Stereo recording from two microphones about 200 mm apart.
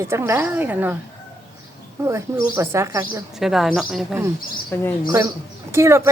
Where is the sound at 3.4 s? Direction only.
Centre (ahead or behind).